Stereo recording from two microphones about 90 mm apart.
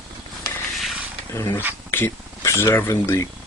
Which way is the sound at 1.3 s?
40° left (ahead or behind).